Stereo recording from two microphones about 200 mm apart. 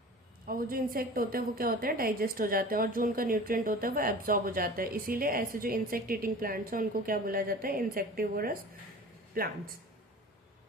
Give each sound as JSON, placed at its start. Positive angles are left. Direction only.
{"t": 0.4, "sound": "a woman's voice", "side_deg": -45}